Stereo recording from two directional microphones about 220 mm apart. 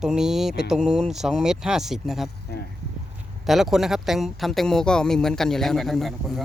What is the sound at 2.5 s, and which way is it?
Speech, 45° left (ahead or behind).